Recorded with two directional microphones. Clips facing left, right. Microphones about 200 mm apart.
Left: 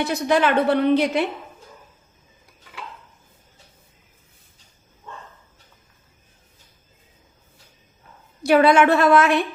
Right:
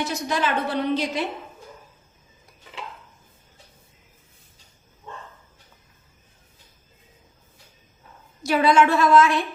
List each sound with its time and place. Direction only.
0.0 s a woman's voice: 60° left (ahead or behind)
8.4 s a woman's voice: 60° left (ahead or behind)